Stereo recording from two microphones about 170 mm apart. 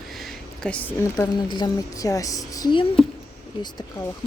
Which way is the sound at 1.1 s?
25° left (ahead or behind).